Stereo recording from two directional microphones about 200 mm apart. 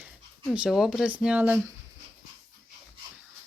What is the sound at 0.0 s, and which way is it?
Speech, 5° right (ahead or behind).